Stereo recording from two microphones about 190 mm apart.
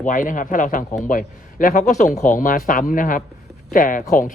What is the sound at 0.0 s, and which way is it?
Speech, 40° left (ahead or behind).